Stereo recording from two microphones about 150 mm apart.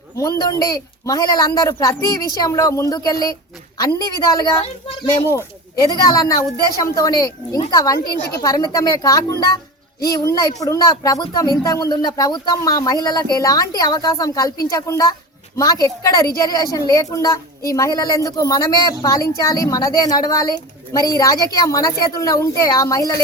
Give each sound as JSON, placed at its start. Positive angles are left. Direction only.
{"t": 0.2, "sound": "speech", "side_deg": 25}
{"t": 5.7, "sound": "speech", "side_deg": 25}